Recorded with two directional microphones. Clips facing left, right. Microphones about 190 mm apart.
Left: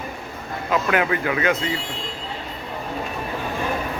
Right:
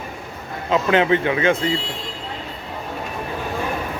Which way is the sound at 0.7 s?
25° right (ahead or behind).